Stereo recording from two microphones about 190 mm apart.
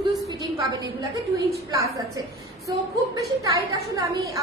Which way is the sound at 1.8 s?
15° right (ahead or behind).